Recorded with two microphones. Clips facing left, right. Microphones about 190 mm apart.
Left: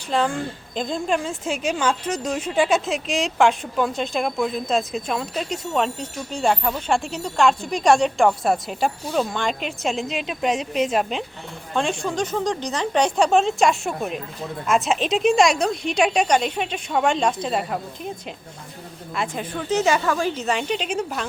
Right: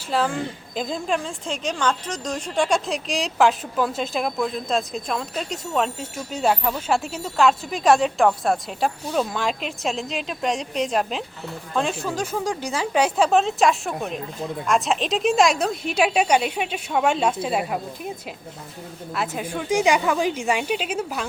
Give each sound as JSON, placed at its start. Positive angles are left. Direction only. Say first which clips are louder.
{"t": 0.1, "sound": "a woman's voice", "louder": "left 1 dB", "side_deg": -5}
{"t": 19.1, "sound": "a woman's voice", "louder": "even", "side_deg": -5}